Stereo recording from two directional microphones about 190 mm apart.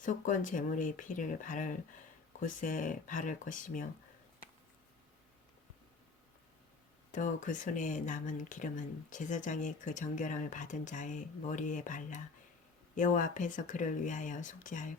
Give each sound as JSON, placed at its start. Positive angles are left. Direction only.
{"t": 0.0, "sound": "speech", "side_deg": 45}
{"t": 7.1, "sound": "speech", "side_deg": 40}